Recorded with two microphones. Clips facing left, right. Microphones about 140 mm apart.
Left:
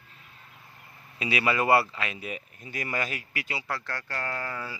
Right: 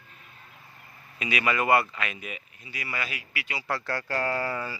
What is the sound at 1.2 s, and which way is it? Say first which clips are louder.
Speech: left 1 dB; 30° left (ahead or behind).